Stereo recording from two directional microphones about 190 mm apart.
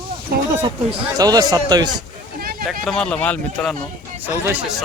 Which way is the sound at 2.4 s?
50° right (ahead or behind).